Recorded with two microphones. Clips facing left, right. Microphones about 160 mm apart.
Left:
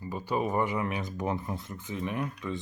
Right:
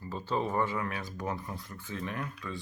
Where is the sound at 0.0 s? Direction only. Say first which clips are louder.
Left 2 dB; 15° left (ahead or behind).